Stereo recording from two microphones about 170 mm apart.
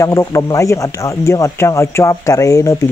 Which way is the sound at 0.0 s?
20° left (ahead or behind).